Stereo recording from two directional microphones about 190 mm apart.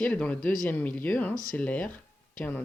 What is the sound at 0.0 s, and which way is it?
Speech, 5° left (ahead or behind).